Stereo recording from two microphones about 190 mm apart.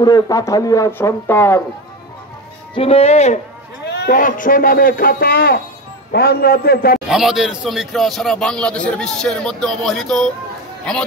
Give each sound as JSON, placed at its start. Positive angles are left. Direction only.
{"t": 0.0, "sound": "speech", "side_deg": 20}
{"t": 2.7, "sound": "speech", "side_deg": 30}
{"t": 3.8, "sound": "a man's voice", "side_deg": 60}
{"t": 7.1, "sound": "a man's voice", "side_deg": 0}